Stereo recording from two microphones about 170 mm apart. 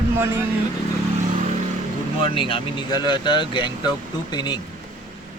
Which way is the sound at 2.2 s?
30° left (ahead or behind).